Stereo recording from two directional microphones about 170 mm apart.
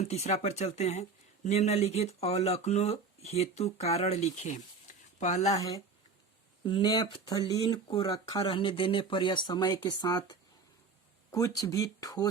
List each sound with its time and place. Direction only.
0.0 s speech: 40° left (ahead or behind)
5.5 s speech: 20° left (ahead or behind)
11.3 s speech: 20° left (ahead or behind)